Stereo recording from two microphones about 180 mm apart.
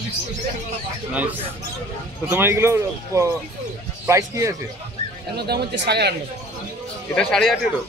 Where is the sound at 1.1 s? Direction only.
10° right (ahead or behind).